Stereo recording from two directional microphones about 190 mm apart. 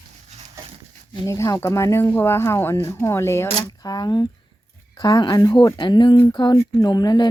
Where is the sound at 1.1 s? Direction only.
15° left (ahead or behind).